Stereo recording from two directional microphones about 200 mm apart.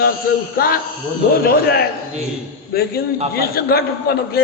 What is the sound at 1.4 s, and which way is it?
Speech, 50° left (ahead or behind).